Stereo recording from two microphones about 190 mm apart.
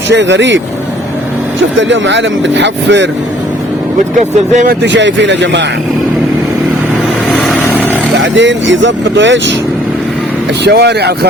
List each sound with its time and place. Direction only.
0.1 s speech: 70° right (ahead or behind)
1.8 s speech: 70° right (ahead or behind)
4.5 s speech: 50° right (ahead or behind)
4.9 s speech: 70° right (ahead or behind)
7.3 s vehicle: centre (ahead or behind)
8.2 s speech: 75° right (ahead or behind)
10.6 s speech: 60° right (ahead or behind)